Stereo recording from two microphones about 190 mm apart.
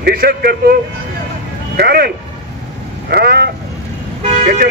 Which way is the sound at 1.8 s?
55° right (ahead or behind).